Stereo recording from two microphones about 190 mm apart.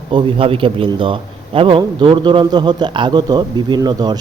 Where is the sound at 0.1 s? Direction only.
25° right (ahead or behind).